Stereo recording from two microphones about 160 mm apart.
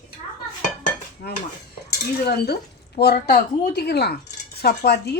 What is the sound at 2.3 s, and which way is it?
Speech, 90° left.